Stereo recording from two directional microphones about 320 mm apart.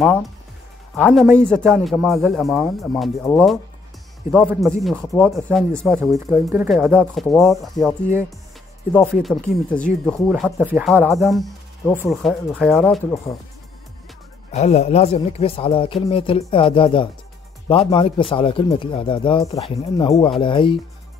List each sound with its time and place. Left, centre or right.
0.0 s speech: centre
14.5 s speech: left